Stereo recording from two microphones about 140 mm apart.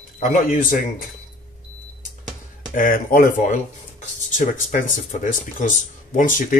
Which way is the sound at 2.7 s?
85° left.